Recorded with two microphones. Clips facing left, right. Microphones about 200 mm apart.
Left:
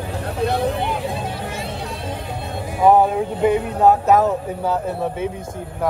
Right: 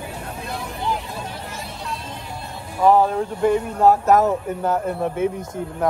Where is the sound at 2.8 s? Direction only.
15° left (ahead or behind).